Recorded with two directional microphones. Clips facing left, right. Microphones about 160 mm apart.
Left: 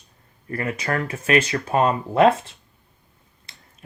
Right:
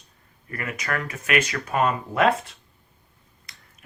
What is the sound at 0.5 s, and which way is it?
Speech, 30° left (ahead or behind).